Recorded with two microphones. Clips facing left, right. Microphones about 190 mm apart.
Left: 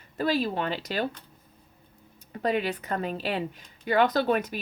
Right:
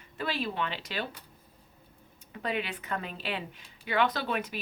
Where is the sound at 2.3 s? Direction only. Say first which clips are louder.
Left 7 dB; 40° left (ahead or behind).